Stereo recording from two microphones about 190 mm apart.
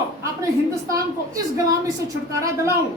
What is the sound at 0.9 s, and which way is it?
A woman's voice, 20° right (ahead or behind).